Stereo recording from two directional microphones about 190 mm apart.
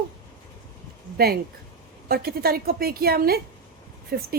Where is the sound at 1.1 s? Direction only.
55° right (ahead or behind).